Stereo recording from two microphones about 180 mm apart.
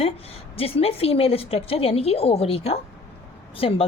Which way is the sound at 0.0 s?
35° left (ahead or behind).